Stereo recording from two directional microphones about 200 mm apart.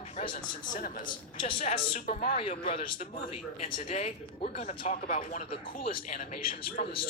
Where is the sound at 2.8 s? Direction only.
45° left (ahead or behind).